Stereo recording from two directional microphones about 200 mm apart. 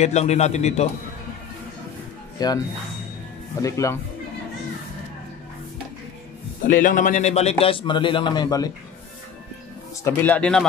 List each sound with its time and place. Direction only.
0.0 s a man's voice: 35° left (ahead or behind)
2.3 s speech: 20° left (ahead or behind)
3.6 s speech: 15° left (ahead or behind)
6.6 s a man's voice: 40° left (ahead or behind); by 8.7 s 20° left (ahead or behind)
10.0 s speech: 10° left (ahead or behind)